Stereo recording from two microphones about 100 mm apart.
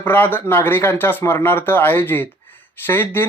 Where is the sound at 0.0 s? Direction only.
20° left (ahead or behind).